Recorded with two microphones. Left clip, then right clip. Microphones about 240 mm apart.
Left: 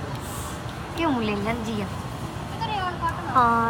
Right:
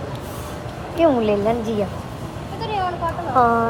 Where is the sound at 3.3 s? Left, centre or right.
Left.